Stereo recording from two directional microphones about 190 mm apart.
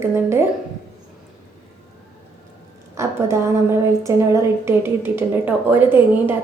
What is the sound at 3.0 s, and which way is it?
A woman's voice, 15° right (ahead or behind).